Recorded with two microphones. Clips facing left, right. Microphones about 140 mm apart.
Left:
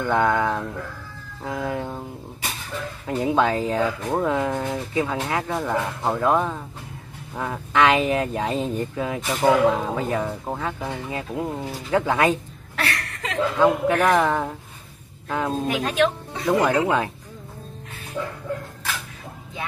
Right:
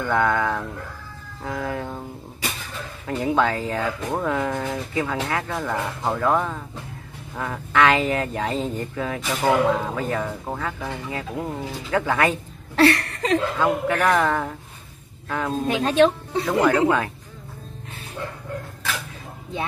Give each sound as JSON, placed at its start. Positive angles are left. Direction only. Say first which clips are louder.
{"t": 0.0, "sound": "speech", "louder": "left 1 dB", "side_deg": 20}
{"t": 3.1, "sound": "speech", "louder": "left 1 dB", "side_deg": 20}
{"t": 12.7, "sound": "a sound", "louder": "right 11 dB", "side_deg": -30}
{"t": 13.6, "sound": "speech", "louder": "left 3 dB", "side_deg": 20}
{"t": 15.7, "sound": "speech", "louder": "right 6 dB", "side_deg": -30}
{"t": 16.4, "sound": "speech", "louder": "even", "side_deg": 15}